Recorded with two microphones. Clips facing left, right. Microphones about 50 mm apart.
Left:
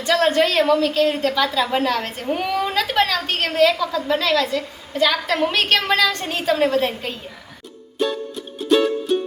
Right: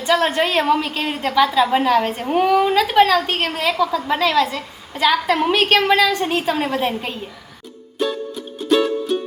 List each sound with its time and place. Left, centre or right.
0.0 s a woman's voice: centre
7.9 s music: centre